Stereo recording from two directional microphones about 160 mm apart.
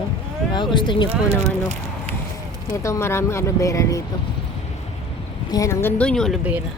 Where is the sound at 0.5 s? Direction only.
30° left (ahead or behind).